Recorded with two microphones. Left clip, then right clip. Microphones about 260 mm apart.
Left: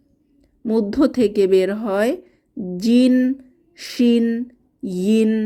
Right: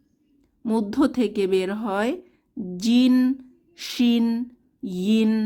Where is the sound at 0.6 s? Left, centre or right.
Centre.